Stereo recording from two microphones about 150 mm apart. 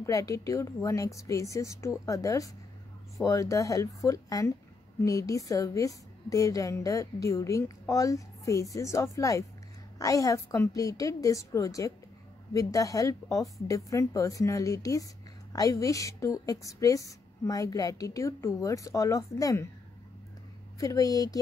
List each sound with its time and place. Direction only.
0.0 s a woman's voice: 20° left (ahead or behind)
20.8 s a woman's voice: 25° left (ahead or behind)